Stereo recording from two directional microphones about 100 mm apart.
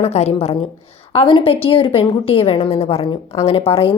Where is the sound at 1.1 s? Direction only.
65° left (ahead or behind).